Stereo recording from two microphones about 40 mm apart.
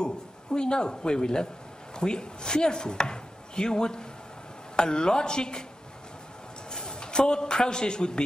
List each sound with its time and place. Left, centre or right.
0.0 s a woman's voice: centre
6.7 s a man's voice: centre